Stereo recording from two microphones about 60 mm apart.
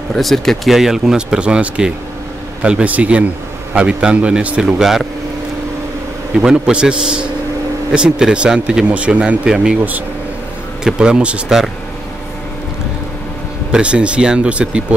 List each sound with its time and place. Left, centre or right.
0.1 s speech: centre
6.3 s speech: centre
9.8 s speech: right
10.8 s speech: centre
13.7 s speech: centre